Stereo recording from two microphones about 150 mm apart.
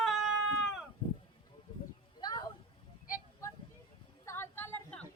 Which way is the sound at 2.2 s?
25° left (ahead or behind).